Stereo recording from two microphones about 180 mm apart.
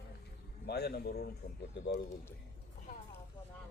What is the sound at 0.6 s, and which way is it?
Speech, 65° left (ahead or behind).